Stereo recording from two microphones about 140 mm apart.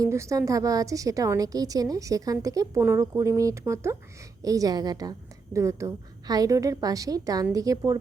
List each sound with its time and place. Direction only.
0.0 s a woman's voice: 20° right (ahead or behind)